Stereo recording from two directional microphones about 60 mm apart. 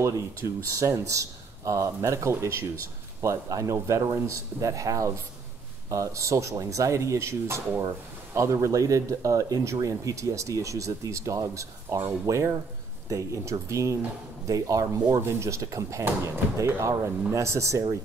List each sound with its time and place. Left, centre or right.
0.7 s speech: right
14.4 s speech: right
15.1 s speech: right